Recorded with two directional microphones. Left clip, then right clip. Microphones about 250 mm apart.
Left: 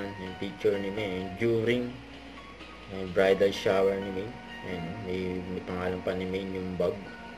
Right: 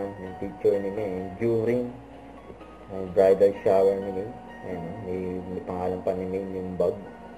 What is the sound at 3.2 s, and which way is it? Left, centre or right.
Speech, left.